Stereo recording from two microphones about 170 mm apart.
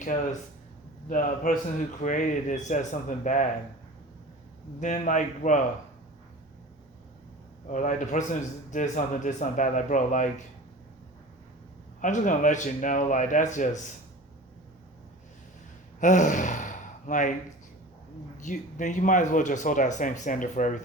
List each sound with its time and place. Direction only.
1.0 s a man's voice: 50° left (ahead or behind)
4.8 s a man's voice: 45° left (ahead or behind)
7.7 s a man's voice: 45° left (ahead or behind)
11.9 s a man's voice: 50° left (ahead or behind)
16.0 s gasp: 45° left (ahead or behind)
18.3 s a man's voice: 45° left (ahead or behind)